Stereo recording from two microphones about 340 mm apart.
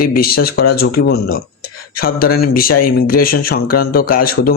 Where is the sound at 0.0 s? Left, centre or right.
Left.